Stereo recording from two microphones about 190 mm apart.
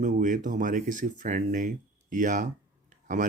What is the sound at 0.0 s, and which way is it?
Speech, 40° right (ahead or behind).